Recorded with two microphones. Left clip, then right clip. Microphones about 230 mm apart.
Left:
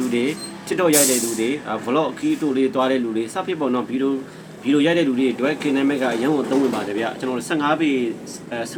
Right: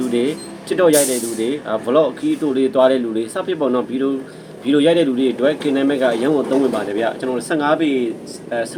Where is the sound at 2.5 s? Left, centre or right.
Centre.